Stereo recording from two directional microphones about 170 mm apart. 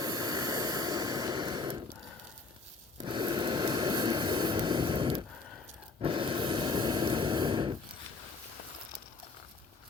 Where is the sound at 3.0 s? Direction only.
30° right (ahead or behind).